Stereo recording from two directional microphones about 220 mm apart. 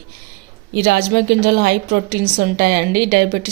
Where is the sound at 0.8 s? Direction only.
45° right (ahead or behind).